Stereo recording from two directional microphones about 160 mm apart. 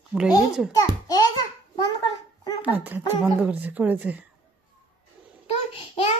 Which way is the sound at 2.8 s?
10° right (ahead or behind).